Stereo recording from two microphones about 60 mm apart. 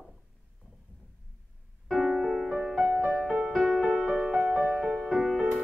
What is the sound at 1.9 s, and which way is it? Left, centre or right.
Music, centre.